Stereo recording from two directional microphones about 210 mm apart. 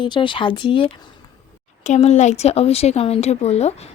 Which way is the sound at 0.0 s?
25° left (ahead or behind).